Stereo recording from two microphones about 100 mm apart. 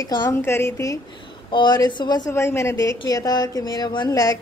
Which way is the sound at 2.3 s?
25° left (ahead or behind).